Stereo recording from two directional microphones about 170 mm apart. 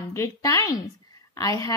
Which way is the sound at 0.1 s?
20° left (ahead or behind).